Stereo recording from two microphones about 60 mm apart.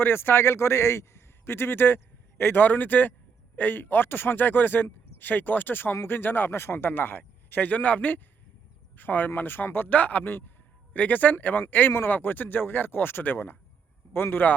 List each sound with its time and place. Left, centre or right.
0.0 s a man's voice: left